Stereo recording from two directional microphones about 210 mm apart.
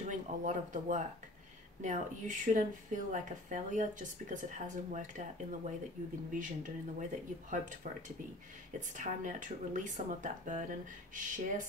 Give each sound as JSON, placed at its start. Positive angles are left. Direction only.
{"t": 0.1, "sound": "a woman's voice", "side_deg": -35}
{"t": 8.7, "sound": "a woman's voice", "side_deg": -35}